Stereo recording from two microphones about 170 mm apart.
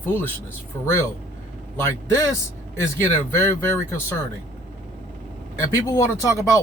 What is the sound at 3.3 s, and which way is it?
Speech, 15° left (ahead or behind).